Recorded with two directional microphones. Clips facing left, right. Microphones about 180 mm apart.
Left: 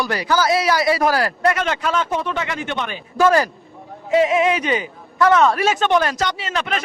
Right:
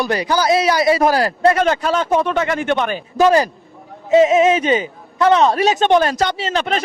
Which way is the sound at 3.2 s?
20° right (ahead or behind).